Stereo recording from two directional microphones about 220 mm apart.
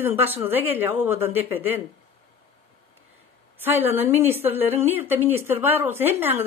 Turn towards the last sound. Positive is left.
turn(degrees=-10)  # may be behind; listen again after turning